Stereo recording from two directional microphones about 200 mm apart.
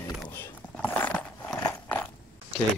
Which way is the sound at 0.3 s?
10° left (ahead or behind).